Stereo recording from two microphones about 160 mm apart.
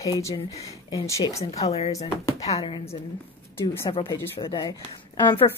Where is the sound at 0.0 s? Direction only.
20° left (ahead or behind).